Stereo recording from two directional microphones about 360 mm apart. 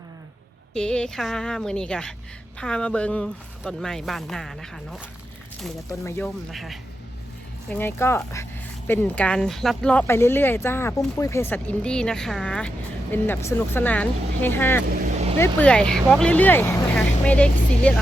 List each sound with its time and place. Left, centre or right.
0.7 s speech: centre
14.8 s vehicle: centre
15.4 s speech: centre